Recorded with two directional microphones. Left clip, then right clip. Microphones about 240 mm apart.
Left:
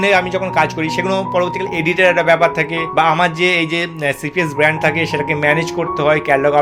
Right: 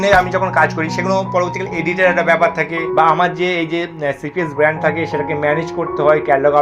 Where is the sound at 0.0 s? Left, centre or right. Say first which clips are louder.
Right 2 dB; left.